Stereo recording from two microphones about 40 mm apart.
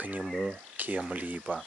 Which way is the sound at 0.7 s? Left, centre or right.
Right.